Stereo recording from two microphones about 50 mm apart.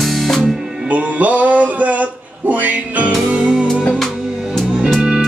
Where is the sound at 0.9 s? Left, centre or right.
Right.